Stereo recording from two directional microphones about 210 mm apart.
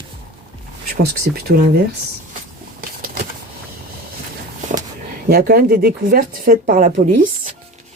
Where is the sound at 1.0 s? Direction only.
45° right (ahead or behind).